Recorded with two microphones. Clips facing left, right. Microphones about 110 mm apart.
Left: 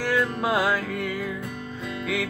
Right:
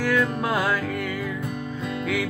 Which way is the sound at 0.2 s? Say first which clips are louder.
Even; 10° left (ahead or behind).